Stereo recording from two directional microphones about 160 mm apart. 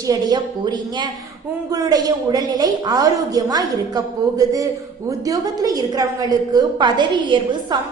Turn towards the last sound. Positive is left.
turn(degrees=-30)  # may be behind; listen again after turning